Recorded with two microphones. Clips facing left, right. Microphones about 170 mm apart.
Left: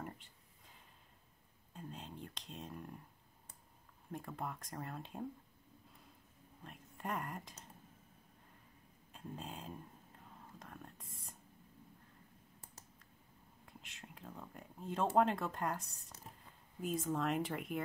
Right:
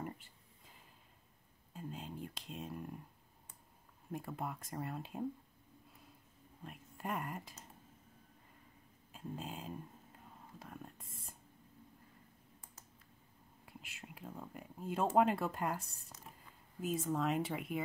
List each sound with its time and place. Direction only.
0.0 s a sound: 5° right (ahead or behind)
1.7 s whispering: 5° right (ahead or behind)
4.1 s speech: 5° right (ahead or behind)
6.6 s speech: 5° right (ahead or behind)
9.1 s a sound: 5° right (ahead or behind)
10.6 s whispering: 5° right (ahead or behind)
11.0 s a sound: 25° right (ahead or behind)
13.7 s speech: 5° right (ahead or behind)
16.8 s speech: centre (ahead or behind)